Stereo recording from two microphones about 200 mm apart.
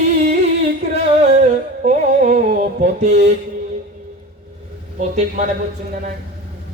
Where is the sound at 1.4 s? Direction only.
35° right (ahead or behind).